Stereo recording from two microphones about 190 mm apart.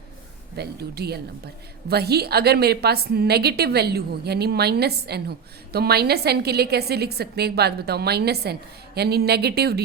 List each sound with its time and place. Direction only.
0.5 s a woman's voice: 60° right (ahead or behind)